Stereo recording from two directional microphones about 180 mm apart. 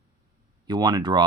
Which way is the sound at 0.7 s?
20° right (ahead or behind).